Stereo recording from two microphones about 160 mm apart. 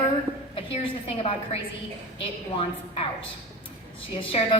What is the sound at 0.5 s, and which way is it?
A woman's voice, 35° left (ahead or behind).